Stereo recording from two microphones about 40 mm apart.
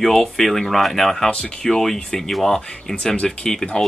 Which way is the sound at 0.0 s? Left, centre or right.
Centre.